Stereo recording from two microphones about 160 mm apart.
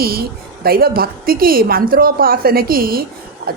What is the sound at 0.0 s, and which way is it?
A woman's voice, 70° right (ahead or behind).